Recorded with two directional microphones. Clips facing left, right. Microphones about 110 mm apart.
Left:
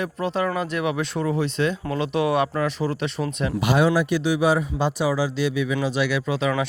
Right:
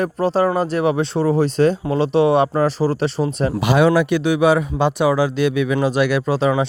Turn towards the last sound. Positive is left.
turn(degrees=-40)  # may be behind; listen again after turning